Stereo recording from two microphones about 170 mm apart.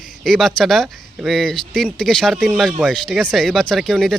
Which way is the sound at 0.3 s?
Centre (ahead or behind).